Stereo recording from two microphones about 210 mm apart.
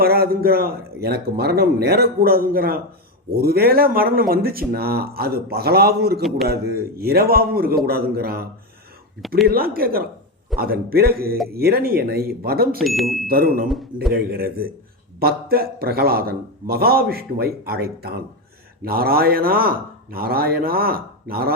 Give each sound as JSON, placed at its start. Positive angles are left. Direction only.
{"t": 0.0, "sound": "a man's voice", "side_deg": -45}
{"t": 9.5, "sound": "a man's voice", "side_deg": -45}
{"t": 12.8, "sound": "speech", "side_deg": 0}
{"t": 13.2, "sound": "a man's voice", "side_deg": -45}
{"t": 13.7, "sound": "speech", "side_deg": 0}
{"t": 14.1, "sound": "a man's voice", "side_deg": -45}